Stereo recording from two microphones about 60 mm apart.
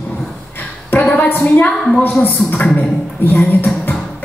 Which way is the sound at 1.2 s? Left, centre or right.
Left.